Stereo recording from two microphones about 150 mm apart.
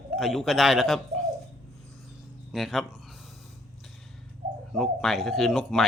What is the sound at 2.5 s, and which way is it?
Speech, centre (ahead or behind).